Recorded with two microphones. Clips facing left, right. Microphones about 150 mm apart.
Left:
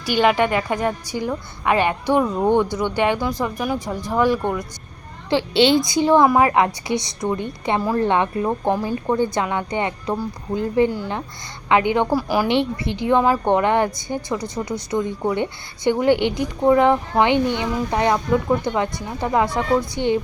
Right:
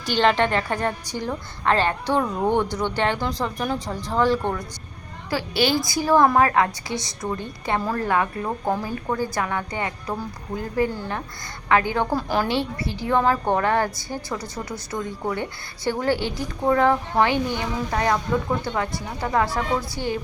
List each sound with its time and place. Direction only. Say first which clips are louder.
0.0 s a woman's voice: left 2 dB; 10° left (ahead or behind)
5.3 s a woman's voice: left 6 dB; 25° left (ahead or behind)
12.5 s a woman's voice: left 5 dB; 20° left (ahead or behind)
14.3 s speech: left 6 dB; 10° right (ahead or behind)
14.6 s a woman's voice: left 7 dB; 15° left (ahead or behind)